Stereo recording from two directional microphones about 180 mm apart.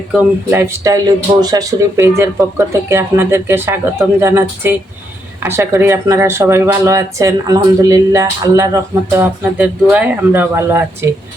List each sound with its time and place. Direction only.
0.1 s speech: 10° right (ahead or behind)